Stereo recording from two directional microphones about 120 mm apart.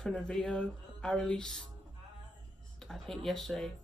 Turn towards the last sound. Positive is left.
turn(degrees=5)  # may be behind; listen again after turning